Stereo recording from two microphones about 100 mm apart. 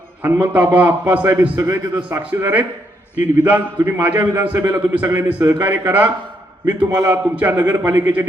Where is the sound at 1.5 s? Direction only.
30° right (ahead or behind).